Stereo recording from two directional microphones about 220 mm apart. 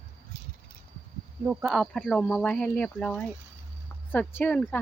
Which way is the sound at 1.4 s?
5° right (ahead or behind).